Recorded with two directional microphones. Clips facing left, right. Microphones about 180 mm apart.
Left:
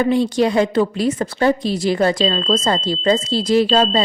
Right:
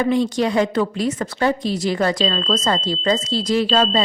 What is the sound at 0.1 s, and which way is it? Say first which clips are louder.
Speech: left 2 dB; 30° left (ahead or behind).